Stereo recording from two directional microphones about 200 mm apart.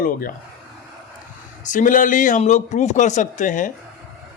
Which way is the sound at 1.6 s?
40° left (ahead or behind).